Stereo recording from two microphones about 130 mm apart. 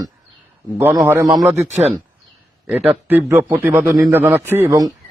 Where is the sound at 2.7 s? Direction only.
15° right (ahead or behind).